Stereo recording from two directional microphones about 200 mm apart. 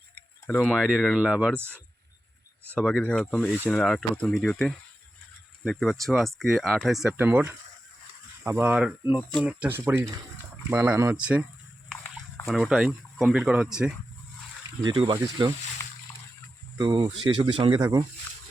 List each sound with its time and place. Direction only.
0.4 s speech: 5° left (ahead or behind)
12.5 s speech: centre (ahead or behind)
14.8 s speech: 25° right (ahead or behind)
15.8 s a sound: 15° left (ahead or behind)
16.7 s speech: 25° right (ahead or behind)